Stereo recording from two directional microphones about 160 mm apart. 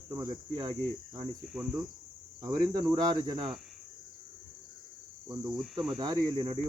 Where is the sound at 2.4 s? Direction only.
25° right (ahead or behind).